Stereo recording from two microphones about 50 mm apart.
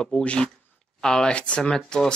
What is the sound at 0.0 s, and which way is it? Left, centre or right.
Speech, centre.